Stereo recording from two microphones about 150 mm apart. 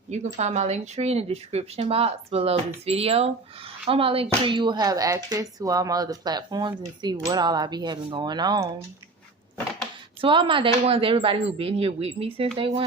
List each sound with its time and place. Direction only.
0.3 s speech: 50° right (ahead or behind); by 8.7 s 30° right (ahead or behind)
10.2 s speech: 35° right (ahead or behind)